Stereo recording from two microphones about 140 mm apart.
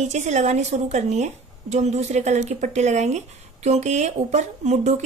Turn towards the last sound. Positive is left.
turn(degrees=-55)  # may be behind; listen again after turning